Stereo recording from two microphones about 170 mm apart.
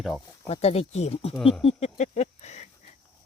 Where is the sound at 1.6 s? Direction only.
40° left (ahead or behind).